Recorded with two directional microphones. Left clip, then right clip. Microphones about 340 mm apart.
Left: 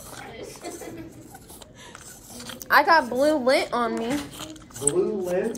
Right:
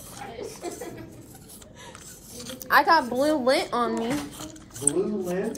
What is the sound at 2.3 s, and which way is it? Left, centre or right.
A woman's voice, centre.